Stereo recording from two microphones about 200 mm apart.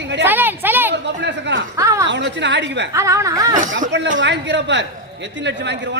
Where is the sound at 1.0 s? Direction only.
60° right (ahead or behind).